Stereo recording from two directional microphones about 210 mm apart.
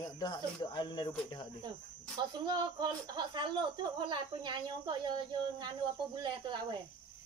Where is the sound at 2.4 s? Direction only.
20° right (ahead or behind).